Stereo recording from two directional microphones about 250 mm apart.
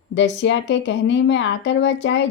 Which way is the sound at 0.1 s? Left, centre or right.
Left.